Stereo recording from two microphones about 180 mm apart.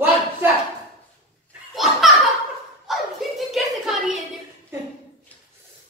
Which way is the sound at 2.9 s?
Centre (ahead or behind).